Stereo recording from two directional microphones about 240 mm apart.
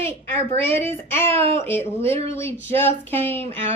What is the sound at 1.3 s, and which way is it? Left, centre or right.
Speech, right.